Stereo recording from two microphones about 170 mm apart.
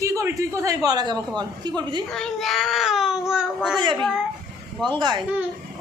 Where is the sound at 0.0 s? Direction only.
15° right (ahead or behind).